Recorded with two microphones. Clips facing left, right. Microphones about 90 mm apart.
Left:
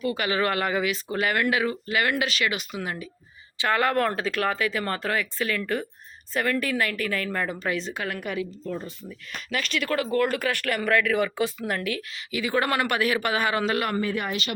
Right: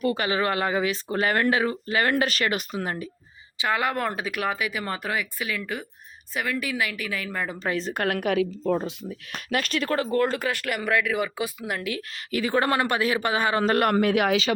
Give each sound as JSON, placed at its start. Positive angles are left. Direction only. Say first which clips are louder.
{"t": 0.0, "sound": "speech", "louder": "right 1 dB", "side_deg": -35}
{"t": 3.6, "sound": "speech", "louder": "left 2 dB", "side_deg": -15}
{"t": 7.6, "sound": "speech", "louder": "right 1 dB", "side_deg": -35}
{"t": 7.9, "sound": "a woman's voice", "louder": "right 6 dB", "side_deg": -55}
{"t": 12.3, "sound": "speech", "louder": "right 2 dB", "side_deg": -40}
{"t": 13.7, "sound": "a man's voice", "louder": "right 5 dB", "side_deg": -50}